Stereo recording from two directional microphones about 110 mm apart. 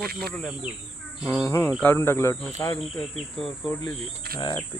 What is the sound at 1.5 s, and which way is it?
Speech, 25° left (ahead or behind).